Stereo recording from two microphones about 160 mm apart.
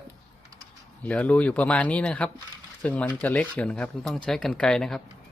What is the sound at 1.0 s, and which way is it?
Speech, 10° left (ahead or behind).